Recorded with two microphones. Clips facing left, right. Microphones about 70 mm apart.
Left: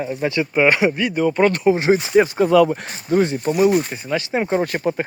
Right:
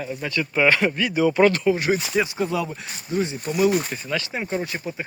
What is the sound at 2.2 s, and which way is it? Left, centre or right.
Speech, left.